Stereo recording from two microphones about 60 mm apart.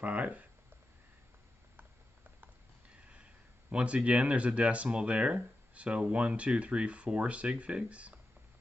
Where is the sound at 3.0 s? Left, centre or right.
Centre.